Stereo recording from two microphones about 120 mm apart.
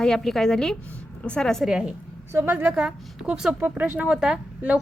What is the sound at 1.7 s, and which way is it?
Speech, 5° right (ahead or behind).